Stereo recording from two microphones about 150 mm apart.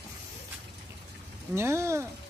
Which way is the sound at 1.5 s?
15° right (ahead or behind).